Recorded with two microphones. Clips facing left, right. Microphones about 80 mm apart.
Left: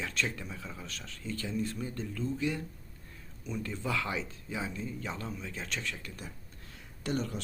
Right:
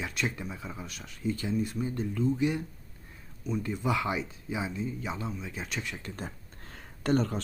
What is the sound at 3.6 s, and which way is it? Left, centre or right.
Speech, centre.